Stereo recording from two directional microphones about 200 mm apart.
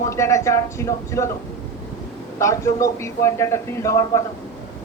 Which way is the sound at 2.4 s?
15° left (ahead or behind).